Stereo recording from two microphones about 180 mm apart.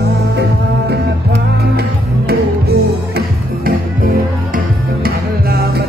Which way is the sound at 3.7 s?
55° right (ahead or behind).